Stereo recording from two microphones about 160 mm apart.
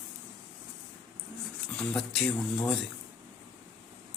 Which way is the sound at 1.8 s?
5° left (ahead or behind).